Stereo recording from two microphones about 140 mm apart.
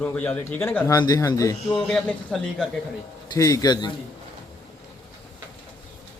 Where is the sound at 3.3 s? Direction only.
25° left (ahead or behind).